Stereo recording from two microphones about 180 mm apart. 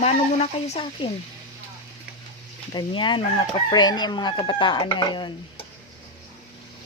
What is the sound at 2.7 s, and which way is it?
Speech, 25° left (ahead or behind).